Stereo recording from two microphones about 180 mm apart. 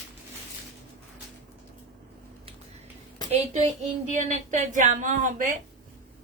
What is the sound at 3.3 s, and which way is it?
A woman's voice, 40° right (ahead or behind).